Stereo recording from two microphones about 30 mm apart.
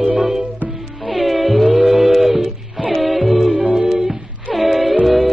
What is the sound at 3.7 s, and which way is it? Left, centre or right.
Humming, centre.